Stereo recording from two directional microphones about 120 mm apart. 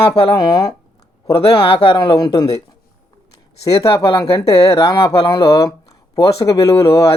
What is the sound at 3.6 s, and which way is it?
Speech, 30° left (ahead or behind).